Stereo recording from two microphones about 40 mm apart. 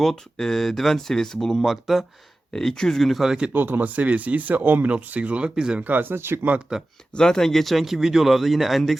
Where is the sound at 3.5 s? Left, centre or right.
Right.